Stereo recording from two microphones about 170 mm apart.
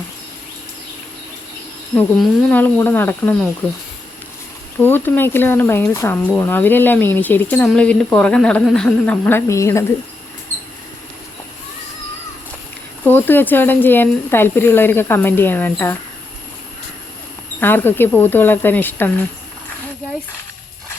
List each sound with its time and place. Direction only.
2.2 s speech: 10° left (ahead or behind)
4.8 s speech: 10° left (ahead or behind)
13.1 s speech: 10° left (ahead or behind)
17.6 s speech: 10° left (ahead or behind)